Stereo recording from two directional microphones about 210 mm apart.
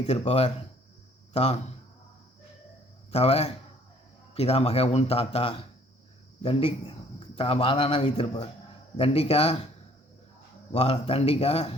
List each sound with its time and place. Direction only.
0.0 s speech: 30° left (ahead or behind)
3.1 s a man's voice: 30° left (ahead or behind)
10.7 s speech: 25° left (ahead or behind)